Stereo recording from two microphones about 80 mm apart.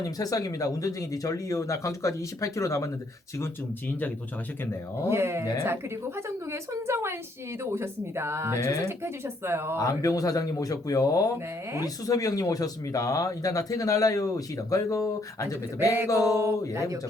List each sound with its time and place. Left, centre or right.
0.0 s speech: left
5.0 s a woman's voice: right
8.5 s speech: left
8.9 s a woman's voice: right
9.7 s speech: left
16.3 s a woman's voice: right